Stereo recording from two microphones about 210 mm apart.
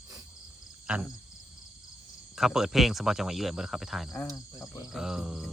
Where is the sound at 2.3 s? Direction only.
Centre (ahead or behind).